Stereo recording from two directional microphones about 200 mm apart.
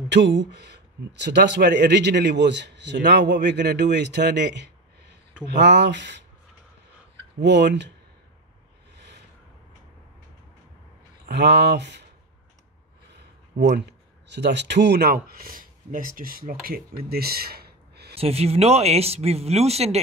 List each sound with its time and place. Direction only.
0.1 s speech: 60° right (ahead or behind)
7.3 s speech: 60° right (ahead or behind)
8.9 s a sound: 60° right (ahead or behind)
11.2 s speech: 55° right (ahead or behind)
13.7 s speech: 60° right (ahead or behind)
18.1 s speech: 30° right (ahead or behind)